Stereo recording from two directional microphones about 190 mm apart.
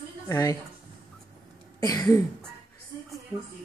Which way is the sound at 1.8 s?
20° left (ahead or behind).